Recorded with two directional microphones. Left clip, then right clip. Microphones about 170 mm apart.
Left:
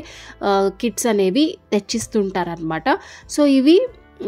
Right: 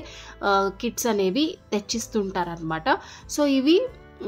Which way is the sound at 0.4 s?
35° left (ahead or behind).